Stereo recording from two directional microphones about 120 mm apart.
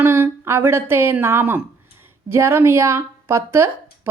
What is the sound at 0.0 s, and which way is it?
Speech, 20° right (ahead or behind).